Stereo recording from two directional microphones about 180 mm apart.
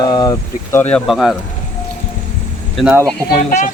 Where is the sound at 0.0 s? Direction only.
20° left (ahead or behind).